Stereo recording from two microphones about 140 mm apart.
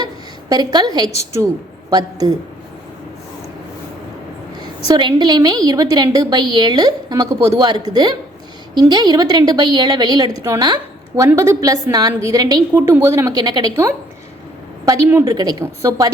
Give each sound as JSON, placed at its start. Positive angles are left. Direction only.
{"t": 0.0, "sound": "a sound", "side_deg": -30}
{"t": 1.9, "sound": "a woman's voice", "side_deg": -30}
{"t": 4.9, "sound": "a woman's voice", "side_deg": -30}
{"t": 12.8, "sound": "a woman's voice", "side_deg": -15}
{"t": 15.1, "sound": "a woman's voice", "side_deg": -25}